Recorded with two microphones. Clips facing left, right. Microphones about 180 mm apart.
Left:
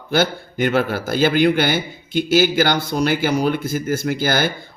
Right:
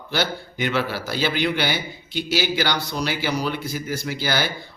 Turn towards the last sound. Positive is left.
turn(degrees=50)  # may be behind; listen again after turning